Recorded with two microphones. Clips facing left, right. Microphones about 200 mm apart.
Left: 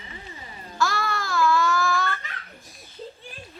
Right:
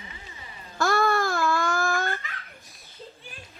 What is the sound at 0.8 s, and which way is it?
Child singing, 55° right (ahead or behind).